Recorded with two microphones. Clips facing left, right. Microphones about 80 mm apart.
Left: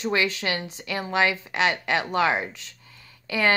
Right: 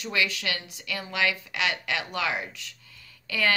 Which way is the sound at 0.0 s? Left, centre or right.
Left.